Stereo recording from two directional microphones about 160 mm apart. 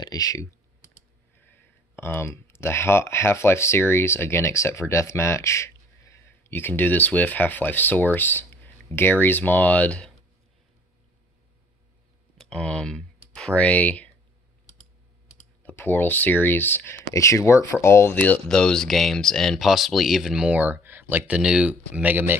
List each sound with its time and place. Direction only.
0.0 s speech: 25° left (ahead or behind); by 10.1 s 5° left (ahead or behind)
12.4 s speech: 5° left (ahead or behind)
15.6 s speech: 15° left (ahead or behind); by 22.4 s 10° right (ahead or behind)